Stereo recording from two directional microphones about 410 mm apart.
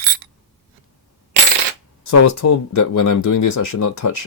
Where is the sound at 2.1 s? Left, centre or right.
Left.